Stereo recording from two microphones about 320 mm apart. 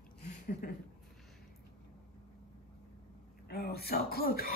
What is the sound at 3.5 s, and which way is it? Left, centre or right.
Throat clearing, left.